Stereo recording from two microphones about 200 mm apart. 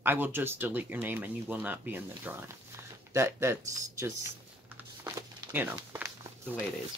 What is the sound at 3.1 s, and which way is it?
Typing, 15° right (ahead or behind).